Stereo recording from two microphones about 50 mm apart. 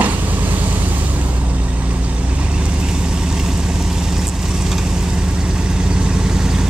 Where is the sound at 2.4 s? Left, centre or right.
Right.